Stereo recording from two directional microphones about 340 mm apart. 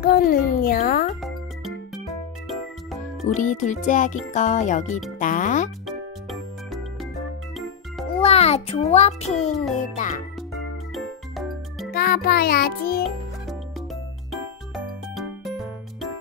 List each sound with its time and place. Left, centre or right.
0.0 s a child's voice: left
2.4 s music: centre
3.3 s a child's voice: left
5.9 s music: centre
8.2 s a child's voice: centre
11.0 s music: centre
11.9 s a child's voice: left
15.1 s music: centre